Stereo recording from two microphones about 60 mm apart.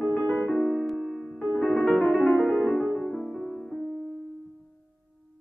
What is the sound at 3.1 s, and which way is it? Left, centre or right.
Music, centre.